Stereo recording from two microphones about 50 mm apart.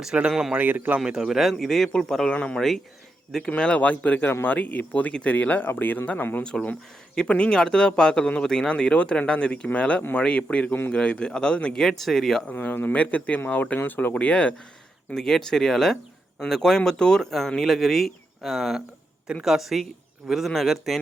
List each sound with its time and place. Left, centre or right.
0.3 s speech: centre
0.5 s speech: right
0.9 s speech: centre
1.5 s speech: centre
2.2 s speech: left
2.6 s speech: centre
3.5 s speech: left
6.4 s speech: centre
11.8 s speech: centre
12.5 s speech: left
12.9 s speech: left
15.1 s speech: centre